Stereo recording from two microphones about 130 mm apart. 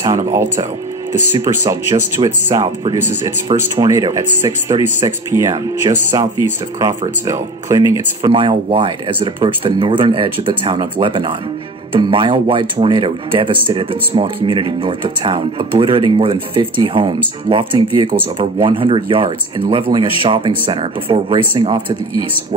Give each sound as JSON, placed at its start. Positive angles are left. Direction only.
{"t": 1.4, "sound": "speech", "side_deg": -25}
{"t": 3.0, "sound": "speech", "side_deg": -20}
{"t": 3.4, "sound": "speech", "side_deg": -35}
{"t": 8.2, "sound": "speech", "side_deg": -40}